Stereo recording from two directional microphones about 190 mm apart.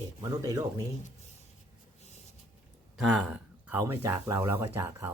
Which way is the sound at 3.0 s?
5° right (ahead or behind).